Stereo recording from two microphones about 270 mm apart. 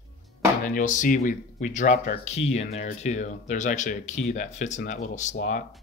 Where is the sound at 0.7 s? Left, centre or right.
Left.